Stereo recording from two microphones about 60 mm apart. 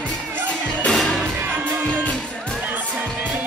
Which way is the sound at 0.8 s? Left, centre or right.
Centre.